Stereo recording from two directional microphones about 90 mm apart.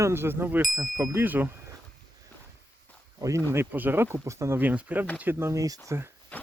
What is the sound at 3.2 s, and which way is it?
Speech, 35° right (ahead or behind).